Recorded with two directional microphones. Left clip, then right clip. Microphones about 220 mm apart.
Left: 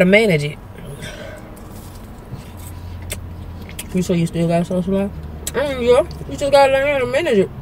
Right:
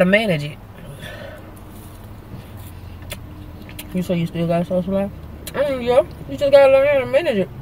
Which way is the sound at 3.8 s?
5° right (ahead or behind).